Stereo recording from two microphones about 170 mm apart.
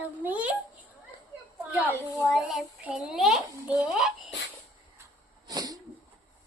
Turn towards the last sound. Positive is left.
turn(degrees=-20)  # may be behind; listen again after turning